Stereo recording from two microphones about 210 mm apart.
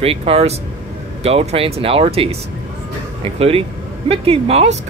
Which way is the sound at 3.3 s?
30° right (ahead or behind).